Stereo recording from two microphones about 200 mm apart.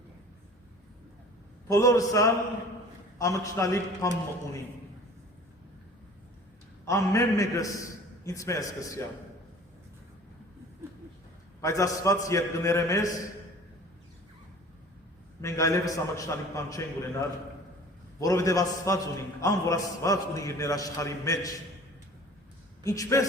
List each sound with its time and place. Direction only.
1.6 s a man's voice: 15° left (ahead or behind)
6.8 s a man's voice: 15° left (ahead or behind)
11.6 s a man's voice: 15° left (ahead or behind)
15.4 s a man's voice: 15° left (ahead or behind)
22.8 s a man's voice: 15° left (ahead or behind)